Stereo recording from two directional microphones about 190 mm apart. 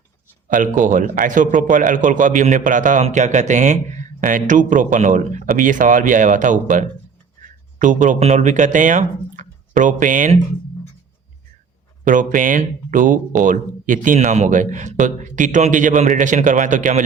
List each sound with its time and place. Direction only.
0.4 s a man's voice: 45° right (ahead or behind)
12.0 s a man's voice: 45° right (ahead or behind)